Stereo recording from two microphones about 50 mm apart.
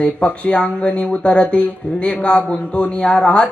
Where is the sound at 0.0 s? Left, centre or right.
Left.